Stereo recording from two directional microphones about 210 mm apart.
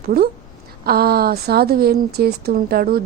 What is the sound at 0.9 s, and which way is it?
Speech, 45° right (ahead or behind).